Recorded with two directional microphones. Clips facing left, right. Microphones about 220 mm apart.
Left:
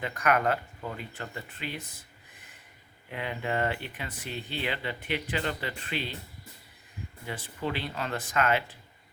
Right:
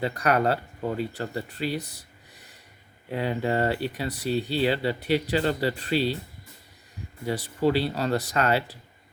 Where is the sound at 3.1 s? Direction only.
35° right (ahead or behind).